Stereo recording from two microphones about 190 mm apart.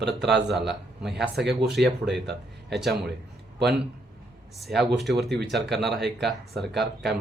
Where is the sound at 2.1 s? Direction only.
60° right (ahead or behind).